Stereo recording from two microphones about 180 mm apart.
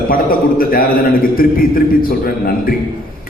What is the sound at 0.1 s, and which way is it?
A man's voice, 55° left (ahead or behind).